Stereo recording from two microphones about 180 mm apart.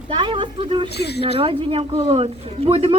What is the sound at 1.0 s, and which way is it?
Speech, 65° left (ahead or behind).